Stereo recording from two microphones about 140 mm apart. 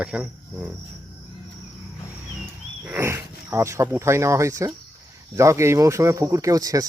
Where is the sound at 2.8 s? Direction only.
15° right (ahead or behind).